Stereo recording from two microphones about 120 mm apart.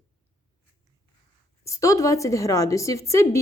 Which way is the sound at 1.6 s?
25° left (ahead or behind).